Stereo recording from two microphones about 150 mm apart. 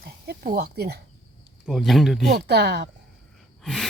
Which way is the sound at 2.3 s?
90° right.